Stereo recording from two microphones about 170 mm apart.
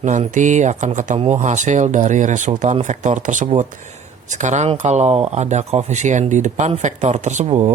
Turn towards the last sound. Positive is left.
turn(degrees=-40)  # may be behind; listen again after turning